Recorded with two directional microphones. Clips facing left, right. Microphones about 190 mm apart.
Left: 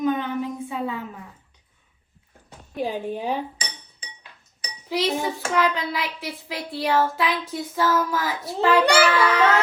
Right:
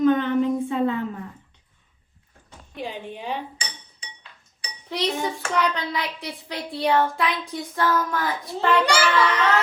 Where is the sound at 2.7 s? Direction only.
40° left (ahead or behind).